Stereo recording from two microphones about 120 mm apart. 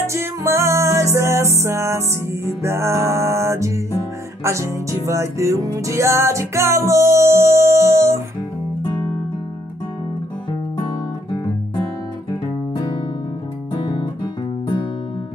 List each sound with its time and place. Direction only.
0.0 s music: 25° right (ahead or behind)
12.3 s music: 40° left (ahead or behind)